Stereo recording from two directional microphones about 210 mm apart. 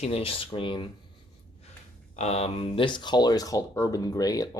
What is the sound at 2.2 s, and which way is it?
Speech, 30° left (ahead or behind).